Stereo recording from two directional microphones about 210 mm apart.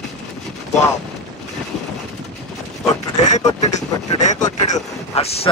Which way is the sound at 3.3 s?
35° left (ahead or behind).